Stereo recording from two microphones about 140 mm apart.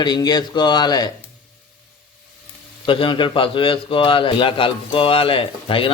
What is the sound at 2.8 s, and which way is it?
A man's voice, 40° left (ahead or behind).